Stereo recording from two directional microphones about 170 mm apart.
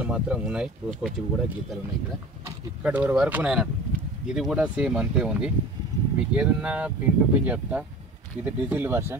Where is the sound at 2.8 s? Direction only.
10° right (ahead or behind).